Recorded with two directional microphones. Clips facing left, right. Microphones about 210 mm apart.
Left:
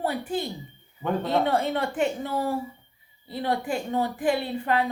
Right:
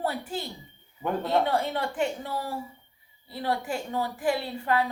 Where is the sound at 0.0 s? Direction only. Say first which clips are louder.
Left 3 dB; 15° left (ahead or behind).